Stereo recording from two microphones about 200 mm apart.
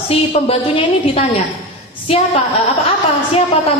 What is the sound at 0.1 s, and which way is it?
A woman's voice, 30° left (ahead or behind).